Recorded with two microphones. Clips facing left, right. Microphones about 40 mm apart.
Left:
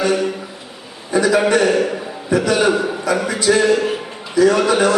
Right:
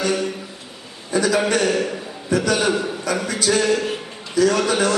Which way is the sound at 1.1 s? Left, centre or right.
Left.